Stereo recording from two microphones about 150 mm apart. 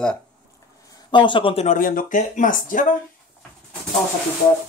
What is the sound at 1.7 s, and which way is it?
Speech, 70° left (ahead or behind).